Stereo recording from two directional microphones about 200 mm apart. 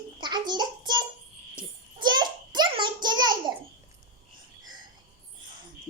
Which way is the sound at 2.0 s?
20° right (ahead or behind).